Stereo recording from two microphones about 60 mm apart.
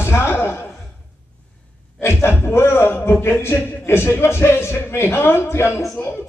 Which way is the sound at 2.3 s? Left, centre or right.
Left.